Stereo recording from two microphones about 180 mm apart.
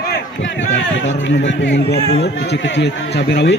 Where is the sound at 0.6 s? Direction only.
90° left; by 3.5 s 70° left (ahead or behind).